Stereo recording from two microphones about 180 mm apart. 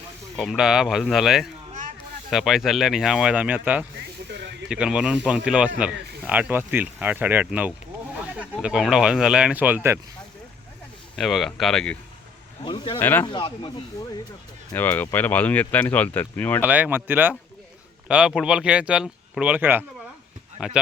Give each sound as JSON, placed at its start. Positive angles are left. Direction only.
{"t": 0.3, "sound": "speech", "side_deg": 0}
{"t": 11.2, "sound": "speech", "side_deg": 0}
{"t": 12.6, "sound": "speech", "side_deg": 30}
{"t": 13.0, "sound": "speech", "side_deg": 10}
{"t": 13.2, "sound": "speech", "side_deg": 25}
{"t": 14.7, "sound": "speech", "side_deg": 10}
{"t": 16.6, "sound": "speech", "side_deg": -10}